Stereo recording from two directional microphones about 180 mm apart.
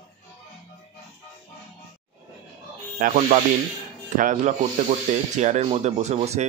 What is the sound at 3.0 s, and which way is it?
Speech, 45° right (ahead or behind).